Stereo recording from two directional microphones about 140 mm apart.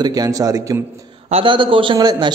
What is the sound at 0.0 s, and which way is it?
Speech, 25° right (ahead or behind).